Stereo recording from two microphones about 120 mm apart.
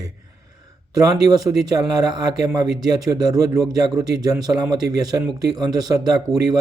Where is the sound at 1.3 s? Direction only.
30° right (ahead or behind).